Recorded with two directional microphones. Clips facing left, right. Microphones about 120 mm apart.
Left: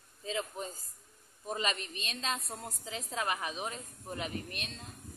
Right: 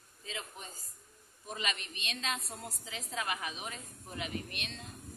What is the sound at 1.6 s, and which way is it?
Speech, 35° left (ahead or behind).